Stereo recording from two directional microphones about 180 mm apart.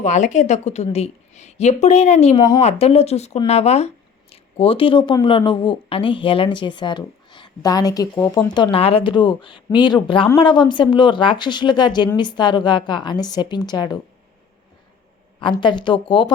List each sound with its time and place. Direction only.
0.0 s a woman's voice: 40° left (ahead or behind); by 8.5 s 10° left (ahead or behind)
8.5 s speech: 25° left (ahead or behind)
15.4 s speech: 25° left (ahead or behind)